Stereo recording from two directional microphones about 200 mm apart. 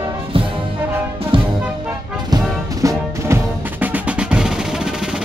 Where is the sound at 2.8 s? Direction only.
10° right (ahead or behind).